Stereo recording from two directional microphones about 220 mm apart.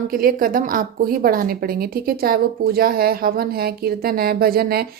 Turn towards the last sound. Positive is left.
turn(degrees=-45)  # may be behind; listen again after turning